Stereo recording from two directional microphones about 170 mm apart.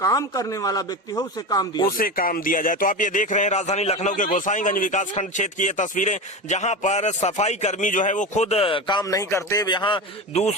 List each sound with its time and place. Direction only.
0.0 s speech: 20° left (ahead or behind)
2.0 s speech: 55° left (ahead or behind); by 10.5 s 35° left (ahead or behind)